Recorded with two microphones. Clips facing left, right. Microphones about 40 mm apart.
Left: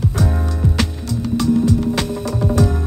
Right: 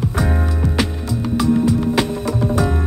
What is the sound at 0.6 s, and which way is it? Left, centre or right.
Music, right.